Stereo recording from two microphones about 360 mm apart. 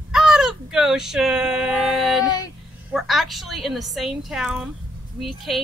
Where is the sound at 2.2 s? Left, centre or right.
Centre.